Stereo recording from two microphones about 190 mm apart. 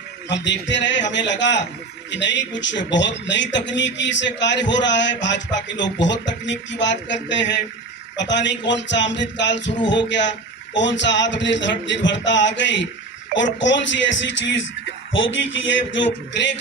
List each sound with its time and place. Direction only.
0.3 s speech: 70° left (ahead or behind)